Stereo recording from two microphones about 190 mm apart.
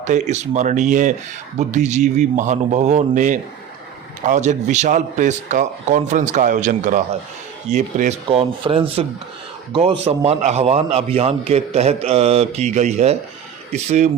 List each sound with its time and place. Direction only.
0.0 s a man's voice: 40° right (ahead or behind)